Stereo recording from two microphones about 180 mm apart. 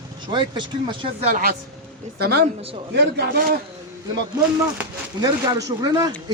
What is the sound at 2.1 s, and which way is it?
Speech, 60° right (ahead or behind).